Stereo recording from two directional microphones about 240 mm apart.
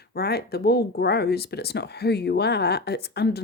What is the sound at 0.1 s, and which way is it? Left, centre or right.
Speech, left.